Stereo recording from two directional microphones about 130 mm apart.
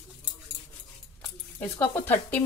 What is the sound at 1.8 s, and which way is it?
Speech, 15° left (ahead or behind).